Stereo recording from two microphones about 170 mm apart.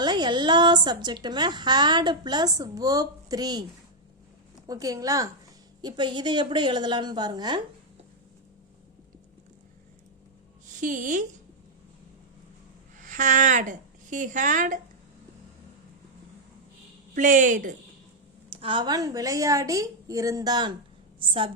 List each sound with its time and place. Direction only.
0.0 s a woman's voice: 25° right (ahead or behind)
4.6 s a woman's voice: 20° right (ahead or behind)
10.8 s a woman's voice: 50° right (ahead or behind)
13.0 s a woman's voice: 50° right (ahead or behind)
17.2 s a woman's voice: 50° right (ahead or behind)
18.5 s a woman's voice: 30° right (ahead or behind)